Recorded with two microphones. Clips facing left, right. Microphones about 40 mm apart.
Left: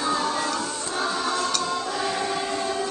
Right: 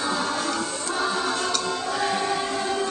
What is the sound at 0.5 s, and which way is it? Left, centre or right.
Choir, centre.